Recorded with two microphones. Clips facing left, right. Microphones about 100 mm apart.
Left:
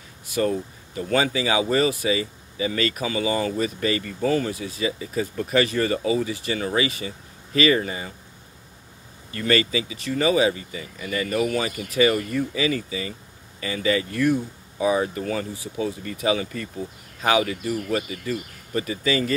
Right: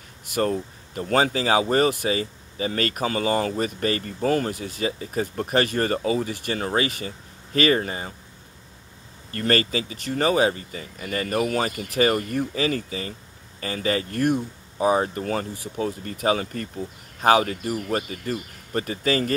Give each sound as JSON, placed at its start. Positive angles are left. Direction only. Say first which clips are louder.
{"t": 0.3, "sound": "speech", "louder": "even", "side_deg": -50}
{"t": 2.0, "sound": "speech", "louder": "left 1 dB", "side_deg": -45}
{"t": 9.3, "sound": "speech", "louder": "left 1 dB", "side_deg": -45}
{"t": 15.5, "sound": "speech", "louder": "even", "side_deg": -55}
{"t": 16.0, "sound": "speech", "louder": "right 1 dB", "side_deg": -45}